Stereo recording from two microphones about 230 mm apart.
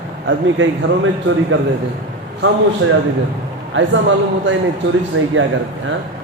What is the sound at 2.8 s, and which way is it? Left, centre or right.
A man's voice, right.